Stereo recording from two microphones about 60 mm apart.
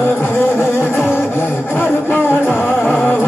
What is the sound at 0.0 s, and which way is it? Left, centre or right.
Music, left.